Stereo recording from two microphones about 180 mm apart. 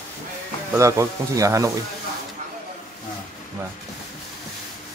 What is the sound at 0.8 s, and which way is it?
Speech, 15° right (ahead or behind).